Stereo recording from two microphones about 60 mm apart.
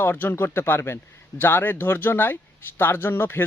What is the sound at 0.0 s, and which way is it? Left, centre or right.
A man's voice, left.